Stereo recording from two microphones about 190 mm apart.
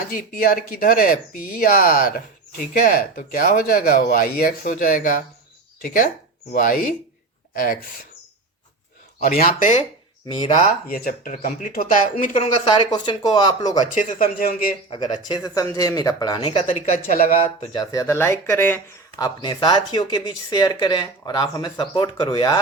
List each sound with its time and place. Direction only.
0.0 s speech: 50° left (ahead or behind)
9.2 s speech: 50° left (ahead or behind)
12.7 s speech: 25° left (ahead or behind)
13.9 s speech: 45° left (ahead or behind)
14.8 s speech: 25° left (ahead or behind)
16.6 s speech: 40° left (ahead or behind)
17.7 s speech: 15° left (ahead or behind)
19.2 s speech: 25° left (ahead or behind)